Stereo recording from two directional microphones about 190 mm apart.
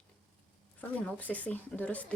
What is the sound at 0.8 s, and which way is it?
A woman's voice, 5° left (ahead or behind).